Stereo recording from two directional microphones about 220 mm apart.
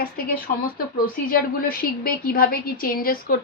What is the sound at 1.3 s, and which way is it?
A woman's voice, 40° left (ahead or behind).